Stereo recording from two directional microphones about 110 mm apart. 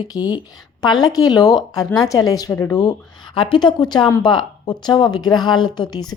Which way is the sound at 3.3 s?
45° left (ahead or behind).